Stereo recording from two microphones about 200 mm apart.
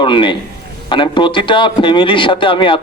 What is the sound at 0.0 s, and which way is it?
A man's voice, 25° left (ahead or behind).